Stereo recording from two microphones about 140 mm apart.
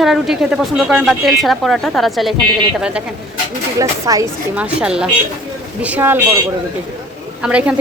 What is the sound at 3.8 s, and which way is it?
Speech, 25° right (ahead or behind).